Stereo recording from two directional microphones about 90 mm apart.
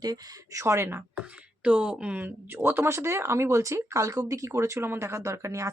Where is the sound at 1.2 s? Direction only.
15° right (ahead or behind).